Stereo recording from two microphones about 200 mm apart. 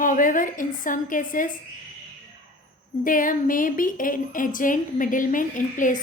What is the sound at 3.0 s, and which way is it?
Speech, 40° left (ahead or behind).